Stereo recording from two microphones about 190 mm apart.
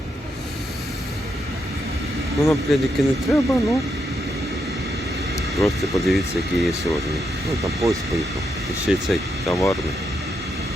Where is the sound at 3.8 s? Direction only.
Centre (ahead or behind).